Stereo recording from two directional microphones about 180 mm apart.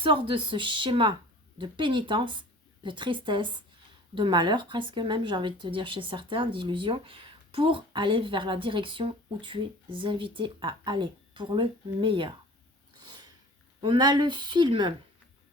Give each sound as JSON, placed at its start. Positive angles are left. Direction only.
{"t": 0.0, "sound": "speech", "side_deg": -30}
{"t": 13.0, "sound": "sniff", "side_deg": -20}
{"t": 13.8, "sound": "speech", "side_deg": -25}